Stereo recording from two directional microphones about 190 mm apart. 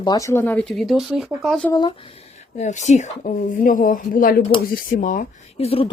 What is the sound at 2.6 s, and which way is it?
Speech, 40° left (ahead or behind).